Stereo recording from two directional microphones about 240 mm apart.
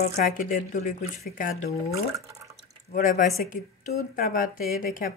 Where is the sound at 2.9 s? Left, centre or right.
Left.